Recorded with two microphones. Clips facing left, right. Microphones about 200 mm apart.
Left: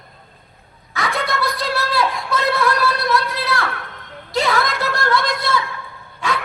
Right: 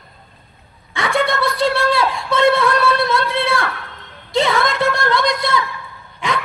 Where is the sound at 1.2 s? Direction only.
25° right (ahead or behind).